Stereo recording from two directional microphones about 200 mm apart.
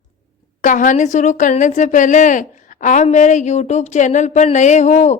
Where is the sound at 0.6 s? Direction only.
40° left (ahead or behind).